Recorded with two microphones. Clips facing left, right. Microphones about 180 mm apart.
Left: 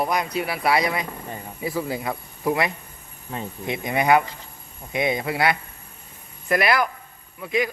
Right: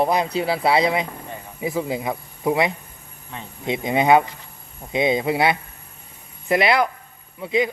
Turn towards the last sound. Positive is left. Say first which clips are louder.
# right 3 dB
turn(degrees=-25)  # may be behind; listen again after turning